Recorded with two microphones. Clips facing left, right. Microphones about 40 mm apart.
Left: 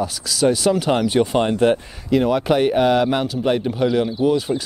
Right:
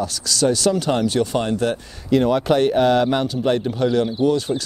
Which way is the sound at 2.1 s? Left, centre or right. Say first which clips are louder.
Even; centre.